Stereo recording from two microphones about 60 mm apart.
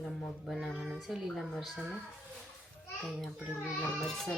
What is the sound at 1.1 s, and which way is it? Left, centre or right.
Speech, centre.